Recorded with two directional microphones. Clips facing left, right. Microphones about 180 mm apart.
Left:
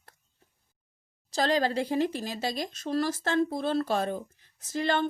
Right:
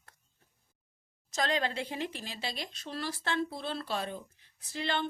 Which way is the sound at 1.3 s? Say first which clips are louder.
Left 6 dB; 35° left (ahead or behind).